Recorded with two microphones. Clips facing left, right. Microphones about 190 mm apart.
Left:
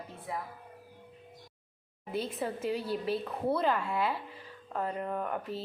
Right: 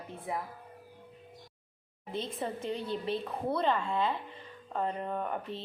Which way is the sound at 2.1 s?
5° left (ahead or behind).